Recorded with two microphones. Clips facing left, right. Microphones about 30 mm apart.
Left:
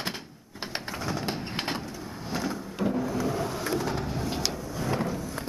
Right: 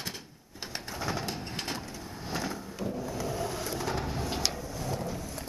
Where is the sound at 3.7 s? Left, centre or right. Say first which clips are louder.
Left 3 dB; centre.